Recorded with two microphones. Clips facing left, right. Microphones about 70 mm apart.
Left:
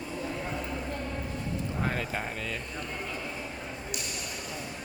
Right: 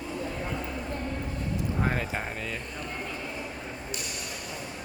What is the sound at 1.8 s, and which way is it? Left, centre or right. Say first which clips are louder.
Speech: right 2 dB; centre.